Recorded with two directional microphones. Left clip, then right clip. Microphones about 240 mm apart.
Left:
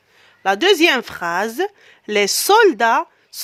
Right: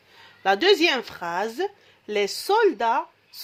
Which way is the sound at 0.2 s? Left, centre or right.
Left.